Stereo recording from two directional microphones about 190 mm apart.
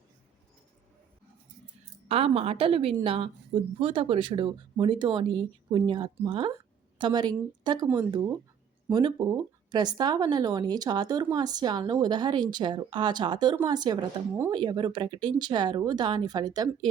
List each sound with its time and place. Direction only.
2.0 s speech: 30° right (ahead or behind)